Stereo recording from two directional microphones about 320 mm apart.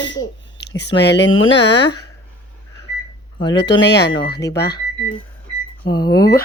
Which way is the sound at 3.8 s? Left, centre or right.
Left.